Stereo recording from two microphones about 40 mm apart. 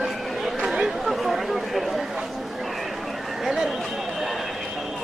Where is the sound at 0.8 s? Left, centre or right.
Centre.